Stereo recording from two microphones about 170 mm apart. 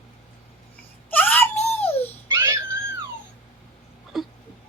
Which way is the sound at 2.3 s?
15° right (ahead or behind).